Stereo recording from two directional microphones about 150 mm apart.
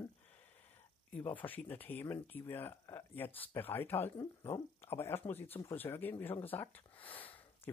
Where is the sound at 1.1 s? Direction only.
10° left (ahead or behind).